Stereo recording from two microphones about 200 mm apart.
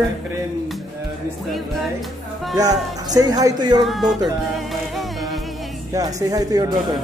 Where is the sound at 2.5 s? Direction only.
20° right (ahead or behind).